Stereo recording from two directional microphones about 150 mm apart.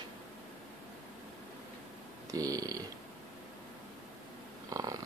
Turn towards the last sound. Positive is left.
turn(degrees=-25)  # may be behind; listen again after turning